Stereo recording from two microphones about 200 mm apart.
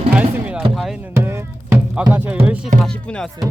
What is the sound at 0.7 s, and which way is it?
Music, centre (ahead or behind).